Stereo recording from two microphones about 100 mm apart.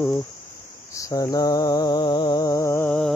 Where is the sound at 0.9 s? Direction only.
35° left (ahead or behind); by 2.4 s 50° left (ahead or behind).